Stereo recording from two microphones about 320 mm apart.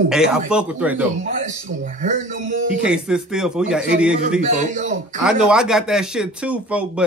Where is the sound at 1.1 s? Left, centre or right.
Right.